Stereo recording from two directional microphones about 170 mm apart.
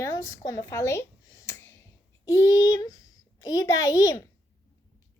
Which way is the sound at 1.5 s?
15° left (ahead or behind).